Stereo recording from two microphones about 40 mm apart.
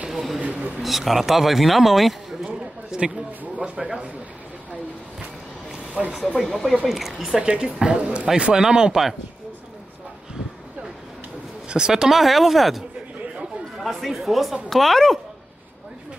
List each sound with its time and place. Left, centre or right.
0.1 s a sound: centre
0.4 s a sound: right
0.8 s speech: centre
2.4 s a sound: centre
3.5 s a woman's voice: right
6.2 s speech: centre
7.3 s a woman's voice: right
11.7 s a woman's voice: centre
12.1 s speech: centre
13.9 s speech: centre